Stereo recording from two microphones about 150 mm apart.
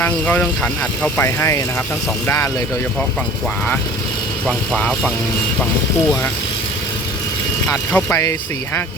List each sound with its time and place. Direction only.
0.0 s speech: 10° left (ahead or behind)
4.4 s speech: 5° left (ahead or behind)
7.7 s speech: 20° left (ahead or behind)